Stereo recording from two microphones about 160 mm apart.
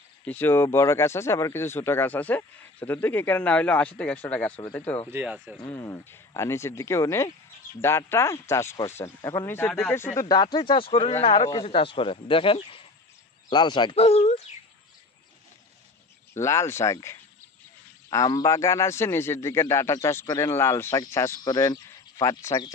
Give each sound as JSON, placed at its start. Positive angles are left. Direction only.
{"t": 0.2, "sound": "a man's voice", "side_deg": 10}
{"t": 5.1, "sound": "speech", "side_deg": -10}
{"t": 5.7, "sound": "a man's voice", "side_deg": 15}
{"t": 16.3, "sound": "a man's voice", "side_deg": 15}